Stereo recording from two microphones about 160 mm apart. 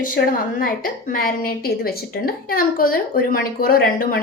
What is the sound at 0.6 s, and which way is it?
A woman's voice, 60° left (ahead or behind).